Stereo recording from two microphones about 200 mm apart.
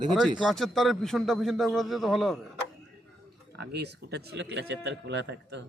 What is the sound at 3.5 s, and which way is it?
Speech, 55° right (ahead or behind).